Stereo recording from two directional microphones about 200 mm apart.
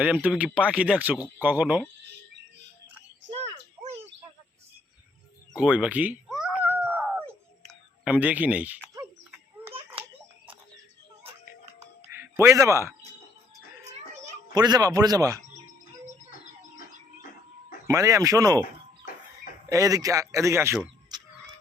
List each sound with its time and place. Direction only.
0.0 s speech: 5° right (ahead or behind)
5.5 s speech: 5° right (ahead or behind)
6.7 s cat: 10° right (ahead or behind)
7.7 s speech: 5° right (ahead or behind)
12.0 s music: 15° right (ahead or behind)
14.5 s speech: 20° right (ahead or behind)
17.8 s speech: 15° right (ahead or behind)
19.6 s speech: 15° right (ahead or behind)